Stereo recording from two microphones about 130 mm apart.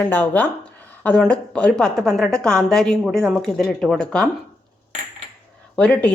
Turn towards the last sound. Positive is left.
turn(degrees=10)  # may be behind; listen again after turning